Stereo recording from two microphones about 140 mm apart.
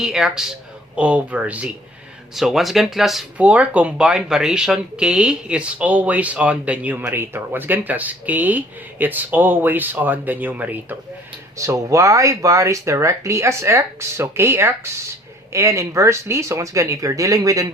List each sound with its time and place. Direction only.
0.0 s speech: 5° right (ahead or behind)
11.5 s speech: 20° right (ahead or behind)